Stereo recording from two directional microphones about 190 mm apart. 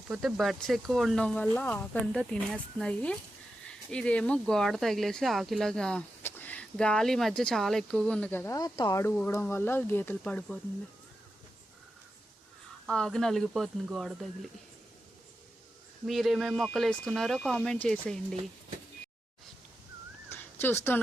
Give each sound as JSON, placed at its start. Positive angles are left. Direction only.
{"t": 0.1, "sound": "speech", "side_deg": 0}
{"t": 12.8, "sound": "speech", "side_deg": 0}
{"t": 16.0, "sound": "speech", "side_deg": 0}
{"t": 20.3, "sound": "a sound", "side_deg": 10}